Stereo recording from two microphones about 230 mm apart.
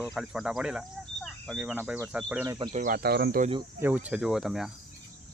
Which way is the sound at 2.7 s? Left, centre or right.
Right.